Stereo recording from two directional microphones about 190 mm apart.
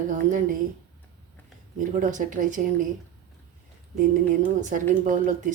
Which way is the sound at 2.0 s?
45° right (ahead or behind).